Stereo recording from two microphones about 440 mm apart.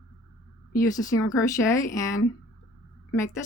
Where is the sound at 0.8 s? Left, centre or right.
Centre.